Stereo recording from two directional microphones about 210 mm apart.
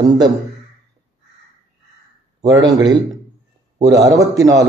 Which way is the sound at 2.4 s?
15° right (ahead or behind).